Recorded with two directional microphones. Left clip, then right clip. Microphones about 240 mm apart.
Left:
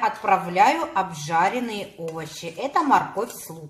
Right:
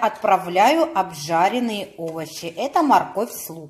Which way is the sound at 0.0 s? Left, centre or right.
Right.